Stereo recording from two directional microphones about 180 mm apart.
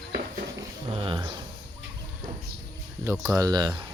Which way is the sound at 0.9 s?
30° right (ahead or behind).